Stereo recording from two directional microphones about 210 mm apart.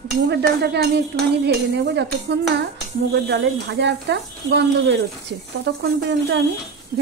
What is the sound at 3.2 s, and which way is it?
Speech, 55° right (ahead or behind).